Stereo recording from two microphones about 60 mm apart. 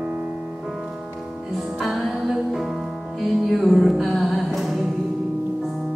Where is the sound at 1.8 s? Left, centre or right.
Centre.